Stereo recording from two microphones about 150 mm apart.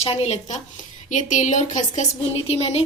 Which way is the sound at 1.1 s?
55° left (ahead or behind).